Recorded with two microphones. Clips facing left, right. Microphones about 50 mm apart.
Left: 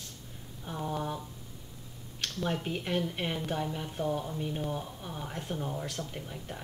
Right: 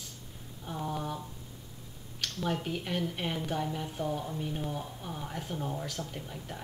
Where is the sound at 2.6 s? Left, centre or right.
Centre.